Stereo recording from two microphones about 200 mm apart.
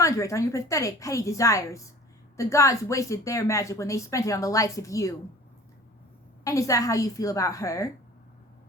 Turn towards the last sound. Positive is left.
turn(degrees=15)  # may be behind; listen again after turning